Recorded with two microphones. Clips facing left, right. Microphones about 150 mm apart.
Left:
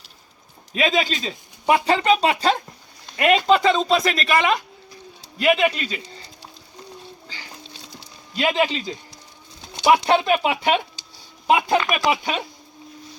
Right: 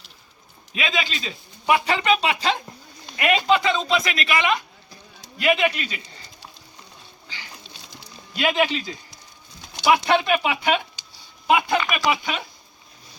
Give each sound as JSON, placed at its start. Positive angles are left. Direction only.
{"t": 0.7, "sound": "speech", "side_deg": 40}
{"t": 8.4, "sound": "speech", "side_deg": 30}